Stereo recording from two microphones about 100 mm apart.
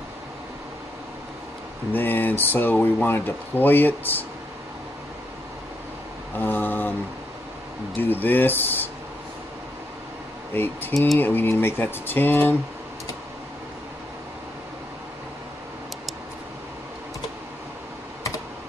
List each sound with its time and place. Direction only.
1.9 s speech: 20° left (ahead or behind)
6.4 s a sound: 20° left (ahead or behind)
8.0 s speech: 20° left (ahead or behind)
10.5 s speech: 20° left (ahead or behind)